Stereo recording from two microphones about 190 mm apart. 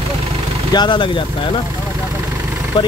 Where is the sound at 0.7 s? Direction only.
25° left (ahead or behind).